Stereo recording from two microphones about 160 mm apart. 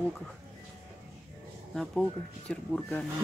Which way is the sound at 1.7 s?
5° left (ahead or behind).